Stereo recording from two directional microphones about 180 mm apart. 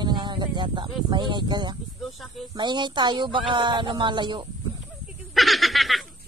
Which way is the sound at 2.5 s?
25° right (ahead or behind).